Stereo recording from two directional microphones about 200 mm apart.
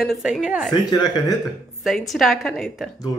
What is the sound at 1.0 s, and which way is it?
Speech, 20° left (ahead or behind).